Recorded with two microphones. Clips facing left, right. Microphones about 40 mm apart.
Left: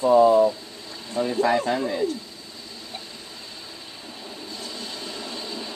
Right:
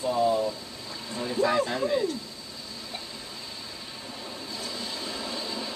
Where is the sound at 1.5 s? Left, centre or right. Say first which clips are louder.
Left 3 dB; centre.